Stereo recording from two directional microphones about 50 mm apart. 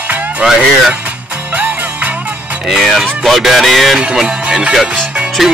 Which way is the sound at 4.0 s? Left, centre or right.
Centre.